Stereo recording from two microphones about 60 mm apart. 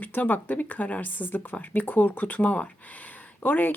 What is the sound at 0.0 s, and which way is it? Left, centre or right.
Speech, left.